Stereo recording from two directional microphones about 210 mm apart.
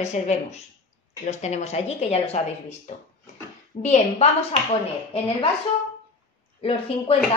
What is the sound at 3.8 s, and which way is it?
Speech, 30° left (ahead or behind).